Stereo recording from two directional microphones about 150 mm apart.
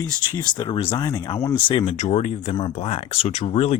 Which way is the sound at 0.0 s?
30° left (ahead or behind).